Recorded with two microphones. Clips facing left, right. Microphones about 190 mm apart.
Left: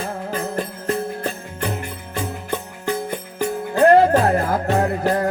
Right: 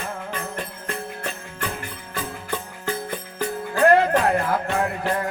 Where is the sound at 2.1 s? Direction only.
20° left (ahead or behind).